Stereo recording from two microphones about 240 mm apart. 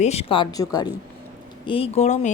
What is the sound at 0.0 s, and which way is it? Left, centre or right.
Speech, left.